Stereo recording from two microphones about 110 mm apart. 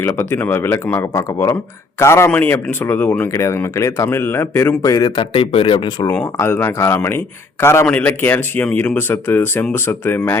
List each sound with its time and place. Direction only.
0.0 s speech: 20° left (ahead or behind); by 5.2 s 35° left (ahead or behind)
5.3 s speech: 55° left (ahead or behind)
6.3 s speech: 20° left (ahead or behind)